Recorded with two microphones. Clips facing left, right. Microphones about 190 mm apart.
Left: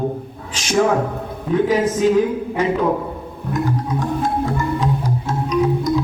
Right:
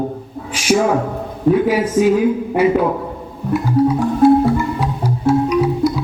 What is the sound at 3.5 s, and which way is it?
Music, 10° right (ahead or behind).